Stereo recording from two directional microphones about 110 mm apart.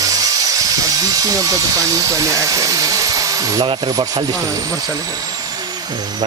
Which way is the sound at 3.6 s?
45° right (ahead or behind).